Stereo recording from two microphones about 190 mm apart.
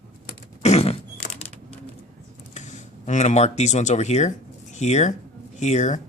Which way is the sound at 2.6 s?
40° left (ahead or behind).